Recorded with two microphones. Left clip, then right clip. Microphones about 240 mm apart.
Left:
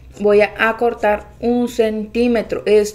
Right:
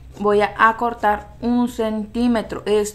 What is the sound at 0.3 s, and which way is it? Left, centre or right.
A woman's voice, right.